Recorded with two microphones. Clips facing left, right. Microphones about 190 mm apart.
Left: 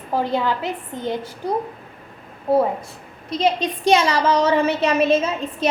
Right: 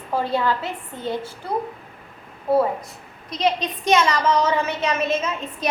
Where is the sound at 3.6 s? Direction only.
30° left (ahead or behind).